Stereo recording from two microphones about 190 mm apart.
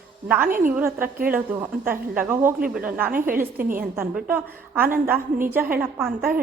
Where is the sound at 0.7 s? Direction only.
10° right (ahead or behind).